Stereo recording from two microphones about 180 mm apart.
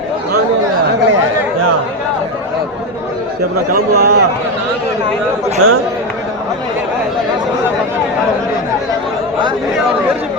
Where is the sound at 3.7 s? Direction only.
60° right (ahead or behind).